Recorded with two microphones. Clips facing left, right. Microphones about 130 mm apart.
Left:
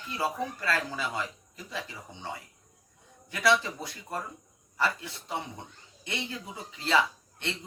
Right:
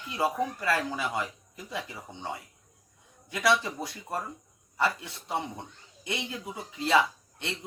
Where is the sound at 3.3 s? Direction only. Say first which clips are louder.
Even; 20° right (ahead or behind).